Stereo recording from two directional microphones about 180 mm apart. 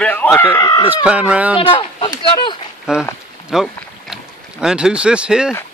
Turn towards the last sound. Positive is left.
turn(degrees=-5)  # may be behind; listen again after turning